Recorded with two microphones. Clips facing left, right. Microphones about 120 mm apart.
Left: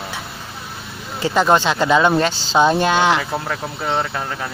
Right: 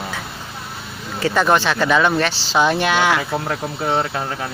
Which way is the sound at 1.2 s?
20° left (ahead or behind).